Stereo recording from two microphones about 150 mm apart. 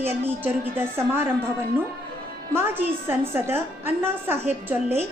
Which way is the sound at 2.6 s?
15° right (ahead or behind).